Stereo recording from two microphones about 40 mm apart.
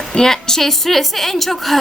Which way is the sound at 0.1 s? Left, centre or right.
Centre.